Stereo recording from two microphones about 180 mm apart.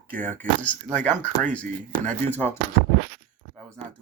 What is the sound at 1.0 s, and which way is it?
Speech, 10° left (ahead or behind).